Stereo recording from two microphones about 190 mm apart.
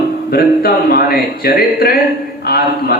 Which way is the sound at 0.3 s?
55° left (ahead or behind).